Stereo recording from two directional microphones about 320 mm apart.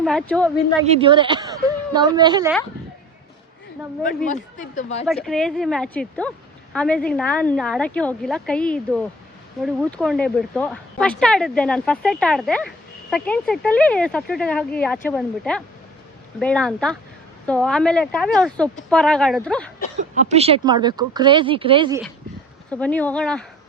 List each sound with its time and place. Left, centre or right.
0.0 s speech: centre
0.9 s a woman's voice: centre
4.0 s speech: left
5.0 s speech: centre
20.0 s speech: right
22.7 s speech: centre